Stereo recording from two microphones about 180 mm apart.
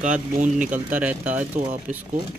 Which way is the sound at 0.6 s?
10° right (ahead or behind).